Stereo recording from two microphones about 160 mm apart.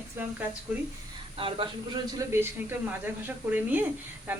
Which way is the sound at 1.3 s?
35° right (ahead or behind).